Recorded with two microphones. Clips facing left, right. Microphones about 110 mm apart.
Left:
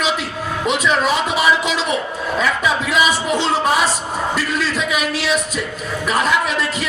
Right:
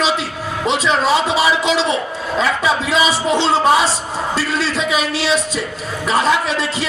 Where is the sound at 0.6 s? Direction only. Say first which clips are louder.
Right 1 dB; 25° right (ahead or behind).